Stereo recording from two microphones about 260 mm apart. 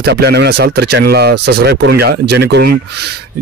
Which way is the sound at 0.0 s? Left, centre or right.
Right.